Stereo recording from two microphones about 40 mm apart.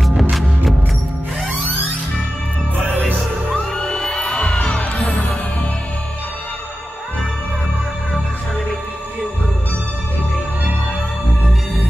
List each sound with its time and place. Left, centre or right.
0.0 s music: centre
3.7 s music: left
4.4 s music: left